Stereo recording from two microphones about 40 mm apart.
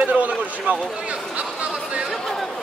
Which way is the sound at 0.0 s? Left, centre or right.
Right.